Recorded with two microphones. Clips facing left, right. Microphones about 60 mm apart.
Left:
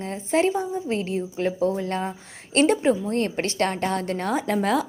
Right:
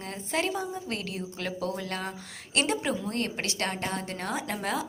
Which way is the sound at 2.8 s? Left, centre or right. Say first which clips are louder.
Left 8 dB; left.